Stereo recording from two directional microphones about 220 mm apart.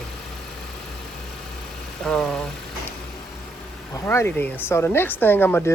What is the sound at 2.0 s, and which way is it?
Vehicle, centre (ahead or behind).